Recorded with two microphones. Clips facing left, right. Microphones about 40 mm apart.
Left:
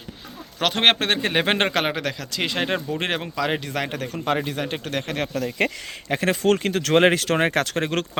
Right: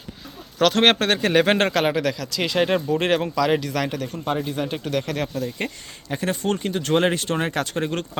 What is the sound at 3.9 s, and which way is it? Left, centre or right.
Speech, left.